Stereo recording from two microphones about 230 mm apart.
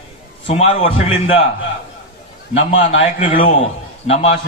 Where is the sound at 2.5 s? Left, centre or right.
Left.